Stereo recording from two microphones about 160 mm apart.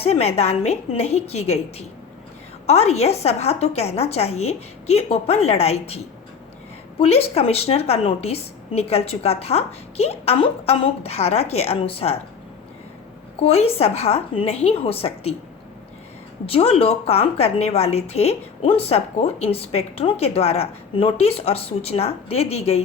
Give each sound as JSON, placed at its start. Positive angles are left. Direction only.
{"t": 0.0, "sound": "a woman's voice", "side_deg": 40}
{"t": 2.6, "sound": "a woman's voice", "side_deg": 40}
{"t": 7.0, "sound": "a woman's voice", "side_deg": 40}
{"t": 13.4, "sound": "a woman's voice", "side_deg": 40}
{"t": 16.5, "sound": "a woman's voice", "side_deg": 35}